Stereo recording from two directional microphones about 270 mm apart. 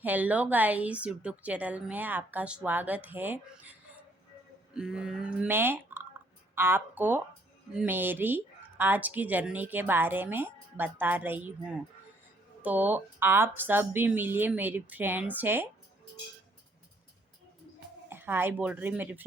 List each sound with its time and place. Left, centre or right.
0.0 s a woman's voice: centre
18.1 s a woman's voice: centre